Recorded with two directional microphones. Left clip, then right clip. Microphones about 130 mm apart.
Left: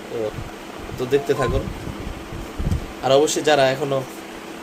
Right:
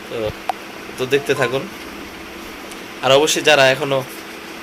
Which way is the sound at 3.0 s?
15° right (ahead or behind).